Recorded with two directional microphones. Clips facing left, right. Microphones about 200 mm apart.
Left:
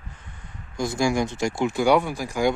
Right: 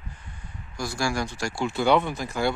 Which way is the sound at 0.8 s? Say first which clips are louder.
Left 5 dB; 20° left (ahead or behind).